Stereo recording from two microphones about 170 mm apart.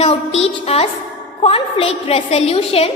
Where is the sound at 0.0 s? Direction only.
35° left (ahead or behind).